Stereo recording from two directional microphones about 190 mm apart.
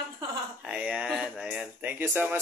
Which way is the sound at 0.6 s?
5° right (ahead or behind).